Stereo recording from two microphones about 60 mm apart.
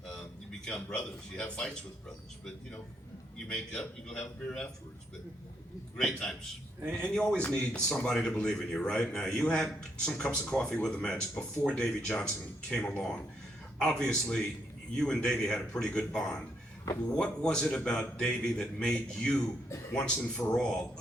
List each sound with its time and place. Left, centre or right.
0.6 s speech: centre
3.3 s speech: centre
6.0 s speech: centre